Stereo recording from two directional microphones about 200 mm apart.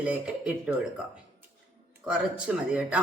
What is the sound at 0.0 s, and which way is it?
Speech, 5° right (ahead or behind).